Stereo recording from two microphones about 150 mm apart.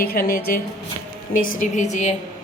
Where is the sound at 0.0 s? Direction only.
90° left; by 0.6 s 75° left (ahead or behind).